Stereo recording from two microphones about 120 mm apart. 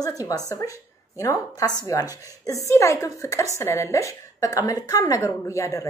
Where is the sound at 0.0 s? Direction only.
30° left (ahead or behind).